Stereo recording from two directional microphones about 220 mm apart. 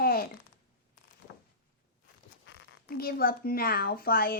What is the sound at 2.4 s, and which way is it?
Speech, 50° left (ahead or behind).